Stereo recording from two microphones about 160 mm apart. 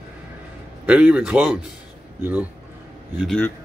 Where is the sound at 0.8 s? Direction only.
5° right (ahead or behind).